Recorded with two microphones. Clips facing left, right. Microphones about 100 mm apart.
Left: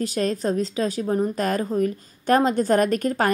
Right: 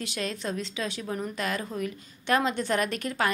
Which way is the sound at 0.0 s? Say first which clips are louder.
Left 9 dB; 40° left (ahead or behind).